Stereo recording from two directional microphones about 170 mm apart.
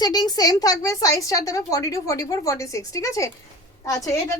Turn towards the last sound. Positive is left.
turn(degrees=20)  # may be behind; listen again after turning